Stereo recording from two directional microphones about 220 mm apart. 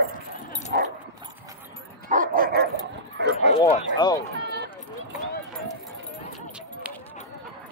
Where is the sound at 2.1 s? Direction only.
40° right (ahead or behind).